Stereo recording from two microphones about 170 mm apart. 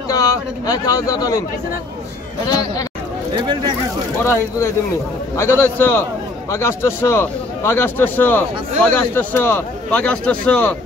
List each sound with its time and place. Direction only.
0.1 s speech: 20° left (ahead or behind)
3.3 s speech: 25° right (ahead or behind)
4.2 s a man's voice: 15° left (ahead or behind)